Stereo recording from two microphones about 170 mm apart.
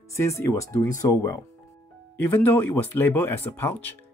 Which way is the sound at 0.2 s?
20° left (ahead or behind).